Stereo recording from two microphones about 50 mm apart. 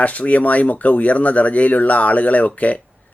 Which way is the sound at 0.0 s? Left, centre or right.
Left.